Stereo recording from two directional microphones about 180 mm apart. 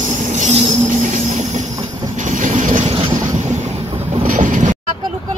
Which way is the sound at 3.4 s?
40° right (ahead or behind).